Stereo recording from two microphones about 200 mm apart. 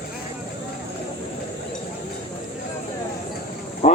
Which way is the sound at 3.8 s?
35° left (ahead or behind).